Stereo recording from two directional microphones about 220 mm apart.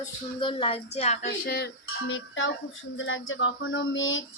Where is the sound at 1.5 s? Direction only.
50° left (ahead or behind).